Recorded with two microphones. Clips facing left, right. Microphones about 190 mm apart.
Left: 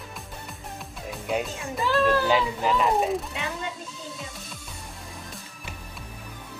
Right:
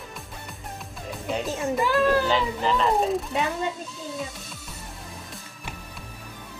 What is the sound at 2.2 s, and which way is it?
Speech, 10° left (ahead or behind).